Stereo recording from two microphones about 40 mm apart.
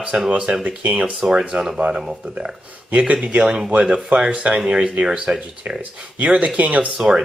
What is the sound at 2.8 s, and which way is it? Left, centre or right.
Speech, right.